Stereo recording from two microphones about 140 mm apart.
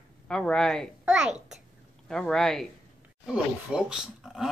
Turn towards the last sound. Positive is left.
turn(degrees=-5)  # may be behind; listen again after turning